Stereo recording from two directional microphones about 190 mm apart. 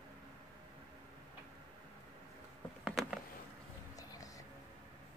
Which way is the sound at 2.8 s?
5° right (ahead or behind).